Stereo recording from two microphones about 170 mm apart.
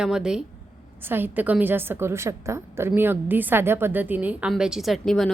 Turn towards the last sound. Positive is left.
turn(degrees=0)  # may be behind; listen again after turning